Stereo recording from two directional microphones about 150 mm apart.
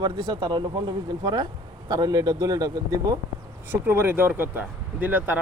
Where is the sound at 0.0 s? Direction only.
30° right (ahead or behind).